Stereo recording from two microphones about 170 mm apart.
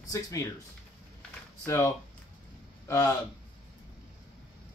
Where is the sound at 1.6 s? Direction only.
15° left (ahead or behind).